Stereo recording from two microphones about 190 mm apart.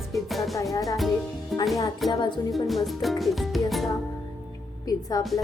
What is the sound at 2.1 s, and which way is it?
Speech, 25° left (ahead or behind).